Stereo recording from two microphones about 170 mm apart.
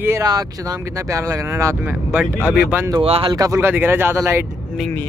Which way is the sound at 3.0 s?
35° right (ahead or behind).